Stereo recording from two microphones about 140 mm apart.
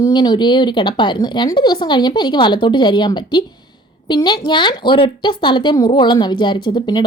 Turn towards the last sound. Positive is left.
turn(degrees=30)  # may be behind; listen again after turning